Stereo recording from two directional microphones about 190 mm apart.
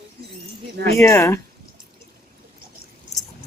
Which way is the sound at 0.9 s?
15° left (ahead or behind).